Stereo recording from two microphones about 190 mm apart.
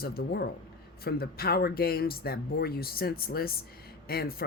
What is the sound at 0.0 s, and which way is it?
Speech, 55° left (ahead or behind).